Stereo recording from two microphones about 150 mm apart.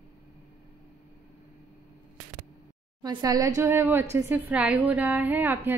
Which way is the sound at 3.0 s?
30° right (ahead or behind).